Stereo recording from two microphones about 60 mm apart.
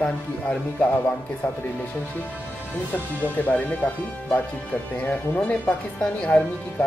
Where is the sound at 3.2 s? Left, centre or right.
Left.